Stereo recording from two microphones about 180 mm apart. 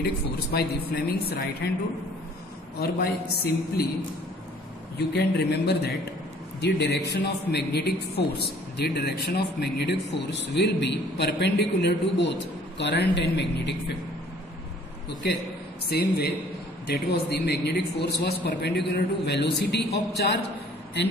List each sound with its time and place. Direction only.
0.0 s a man's voice: 60° left (ahead or behind)
2.8 s a man's voice: 60° left (ahead or behind)
4.9 s a man's voice: 65° left (ahead or behind)
15.9 s a man's voice: 60° left (ahead or behind)